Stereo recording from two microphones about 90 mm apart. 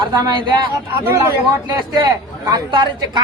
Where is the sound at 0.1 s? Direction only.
45° right (ahead or behind).